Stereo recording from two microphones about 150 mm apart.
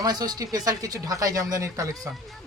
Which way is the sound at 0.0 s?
25° right (ahead or behind).